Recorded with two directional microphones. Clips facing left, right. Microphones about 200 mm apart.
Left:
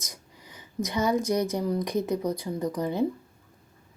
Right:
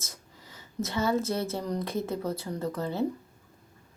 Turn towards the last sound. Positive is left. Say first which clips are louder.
# left 3 dB
turn(degrees=15)  # may be behind; listen again after turning